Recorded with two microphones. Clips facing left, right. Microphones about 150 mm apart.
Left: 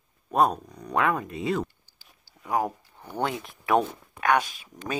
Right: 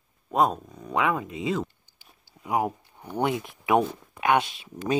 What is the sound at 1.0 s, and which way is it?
Speech, 15° right (ahead or behind).